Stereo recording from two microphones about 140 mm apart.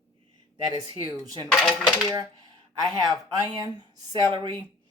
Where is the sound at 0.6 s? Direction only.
30° right (ahead or behind).